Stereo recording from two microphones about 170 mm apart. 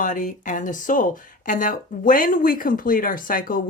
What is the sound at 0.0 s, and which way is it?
Speech, 50° left (ahead or behind).